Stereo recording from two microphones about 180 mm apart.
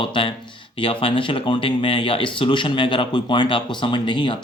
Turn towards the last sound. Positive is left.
turn(degrees=25)  # may be behind; listen again after turning